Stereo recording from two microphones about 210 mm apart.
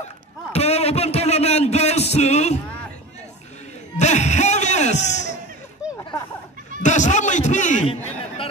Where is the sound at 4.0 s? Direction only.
35° left (ahead or behind).